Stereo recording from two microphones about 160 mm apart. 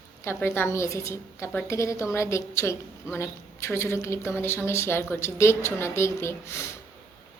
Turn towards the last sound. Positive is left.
turn(degrees=15)  # may be behind; listen again after turning